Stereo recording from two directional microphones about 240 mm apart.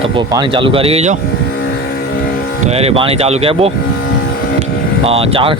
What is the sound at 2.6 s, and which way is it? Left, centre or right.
Speech, right.